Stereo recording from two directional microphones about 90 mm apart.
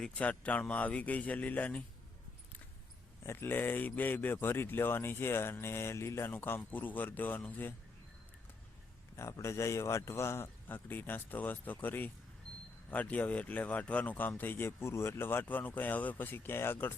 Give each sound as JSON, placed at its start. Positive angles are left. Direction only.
{"t": 0.0, "sound": "speech", "side_deg": 15}
{"t": 3.2, "sound": "speech", "side_deg": 20}
{"t": 9.1, "sound": "speech", "side_deg": 30}